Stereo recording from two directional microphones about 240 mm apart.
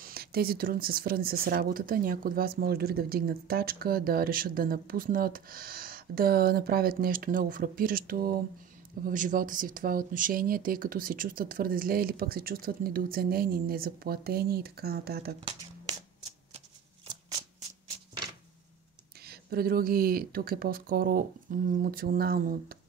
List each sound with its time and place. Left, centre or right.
0.0 s speech: right
19.2 s speech: right